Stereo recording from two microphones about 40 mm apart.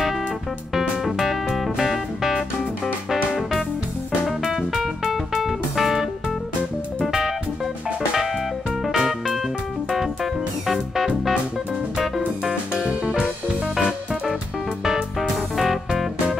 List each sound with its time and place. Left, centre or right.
0.7 s music: centre
4.4 s music: centre
7.1 s music: centre
8.8 s music: centre
12.8 s music: right
14.9 s music: centre